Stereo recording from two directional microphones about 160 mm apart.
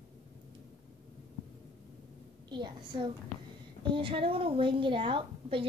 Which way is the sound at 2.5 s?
30° right (ahead or behind).